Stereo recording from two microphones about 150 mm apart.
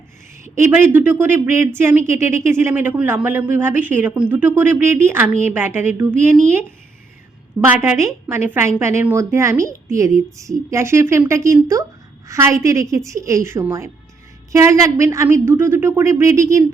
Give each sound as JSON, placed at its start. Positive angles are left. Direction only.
{"t": 0.4, "sound": "speech", "side_deg": -15}
{"t": 7.6, "sound": "a woman's voice", "side_deg": -15}